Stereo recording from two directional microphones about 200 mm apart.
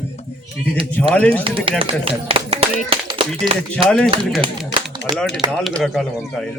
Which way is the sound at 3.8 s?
25° right (ahead or behind).